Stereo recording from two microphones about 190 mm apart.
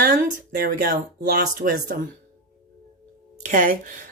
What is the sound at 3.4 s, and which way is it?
Speech, 40° right (ahead or behind).